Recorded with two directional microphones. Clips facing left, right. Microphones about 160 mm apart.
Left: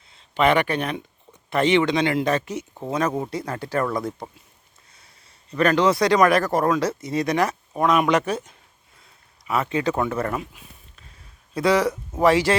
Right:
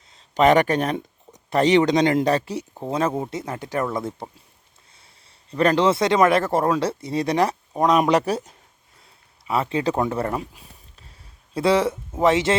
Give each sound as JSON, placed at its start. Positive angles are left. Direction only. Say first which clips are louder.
{"t": 0.1, "sound": "speech", "louder": "right 3 dB", "side_deg": -40}
{"t": 3.2, "sound": "speech", "louder": "even", "side_deg": -20}
{"t": 5.5, "sound": "speech", "louder": "right 1 dB", "side_deg": -30}